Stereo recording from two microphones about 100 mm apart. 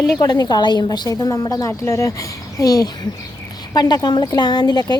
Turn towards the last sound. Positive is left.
turn(degrees=45)  # may be behind; listen again after turning